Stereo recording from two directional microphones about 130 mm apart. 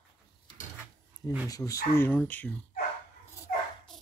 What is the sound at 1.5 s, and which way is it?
Speech, 25° left (ahead or behind).